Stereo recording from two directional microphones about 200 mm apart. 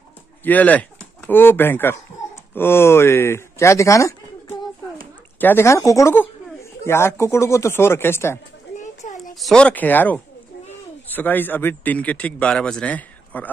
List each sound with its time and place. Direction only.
0.4 s speech: 10° left (ahead or behind)
8.7 s a sound: 35° left (ahead or behind)
9.3 s speech: centre (ahead or behind)